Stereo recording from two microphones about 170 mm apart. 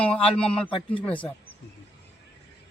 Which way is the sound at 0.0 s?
5° left (ahead or behind).